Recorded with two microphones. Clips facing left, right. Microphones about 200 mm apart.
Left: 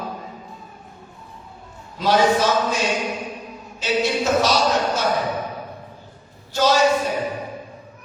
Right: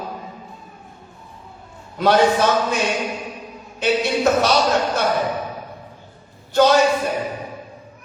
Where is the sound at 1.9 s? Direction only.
60° right (ahead or behind).